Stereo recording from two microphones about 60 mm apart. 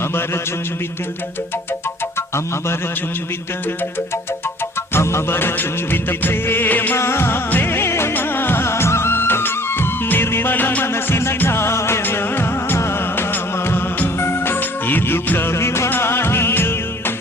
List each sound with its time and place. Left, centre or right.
4.9 s music of bollywood: left
7.0 s music: left
8.1 s music of bollywood: left
10.9 s music: left
12.0 s music: left
13.3 s music of bollywood: left
15.9 s music: left